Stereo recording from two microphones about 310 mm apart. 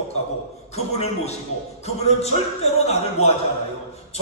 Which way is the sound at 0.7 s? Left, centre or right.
Left.